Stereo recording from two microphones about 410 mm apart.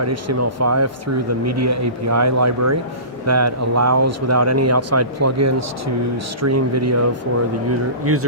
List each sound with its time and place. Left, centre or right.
0.0 s speech: right